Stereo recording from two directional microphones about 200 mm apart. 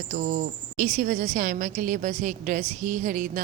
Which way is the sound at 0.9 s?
45° right (ahead or behind).